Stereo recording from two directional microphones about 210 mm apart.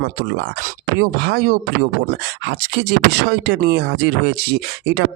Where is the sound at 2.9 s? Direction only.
55° right (ahead or behind).